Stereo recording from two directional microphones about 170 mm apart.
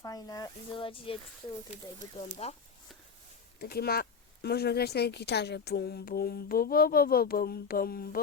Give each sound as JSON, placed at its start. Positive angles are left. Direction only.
{"t": 0.0, "sound": "speech", "side_deg": 20}
{"t": 3.6, "sound": "a woman's voice", "side_deg": 65}